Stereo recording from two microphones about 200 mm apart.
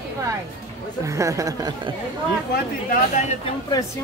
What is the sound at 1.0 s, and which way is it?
Speech, 15° right (ahead or behind).